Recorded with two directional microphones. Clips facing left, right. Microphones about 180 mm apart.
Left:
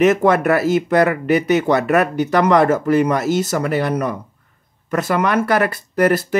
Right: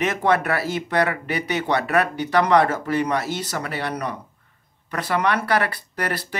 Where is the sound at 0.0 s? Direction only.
45° left (ahead or behind).